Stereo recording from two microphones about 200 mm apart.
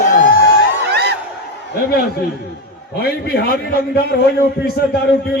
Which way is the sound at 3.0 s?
50° left (ahead or behind).